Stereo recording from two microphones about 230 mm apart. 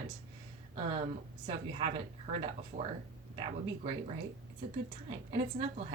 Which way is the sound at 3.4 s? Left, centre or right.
Right.